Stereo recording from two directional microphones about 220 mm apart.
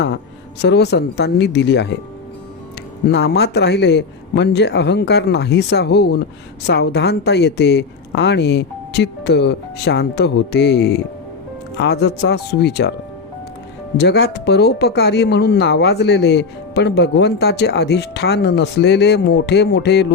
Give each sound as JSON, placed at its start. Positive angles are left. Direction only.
{"t": 0.6, "sound": "speech", "side_deg": 50}
{"t": 3.1, "sound": "speech", "side_deg": 50}
{"t": 13.9, "sound": "speech", "side_deg": 50}